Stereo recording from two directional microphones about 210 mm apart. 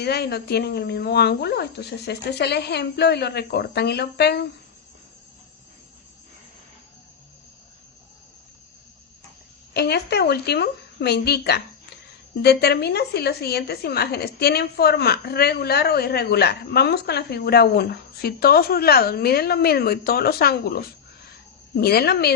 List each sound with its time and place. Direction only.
0.0 s a woman's voice: 50° left (ahead or behind)
9.7 s a woman's voice: 50° left (ahead or behind)